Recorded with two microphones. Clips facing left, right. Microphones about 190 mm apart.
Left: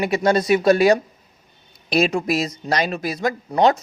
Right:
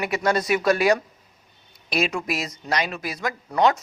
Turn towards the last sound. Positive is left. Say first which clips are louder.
# left 4 dB
turn(degrees=30)  # may be behind; listen again after turning